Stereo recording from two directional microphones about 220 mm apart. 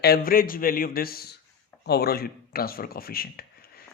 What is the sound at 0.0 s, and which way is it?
Speech, 45° left (ahead or behind).